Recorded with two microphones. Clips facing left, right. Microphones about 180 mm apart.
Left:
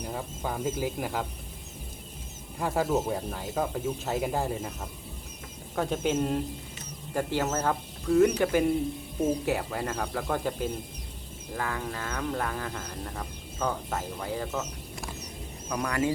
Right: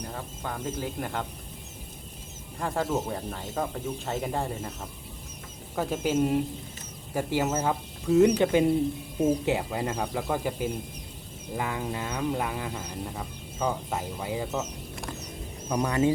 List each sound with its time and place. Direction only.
0.1 s speech: 10° left (ahead or behind)
2.6 s speech: 5° left (ahead or behind); by 14.6 s 15° right (ahead or behind)
15.7 s speech: 25° right (ahead or behind)